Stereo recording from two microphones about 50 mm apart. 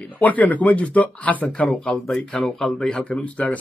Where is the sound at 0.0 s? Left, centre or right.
Left.